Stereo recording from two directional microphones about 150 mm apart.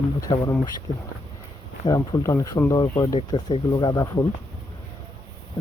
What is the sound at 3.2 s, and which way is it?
Speech, 40° left (ahead or behind).